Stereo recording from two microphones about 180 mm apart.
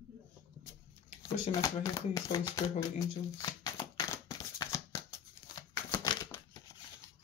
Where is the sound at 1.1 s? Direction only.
45° left (ahead or behind).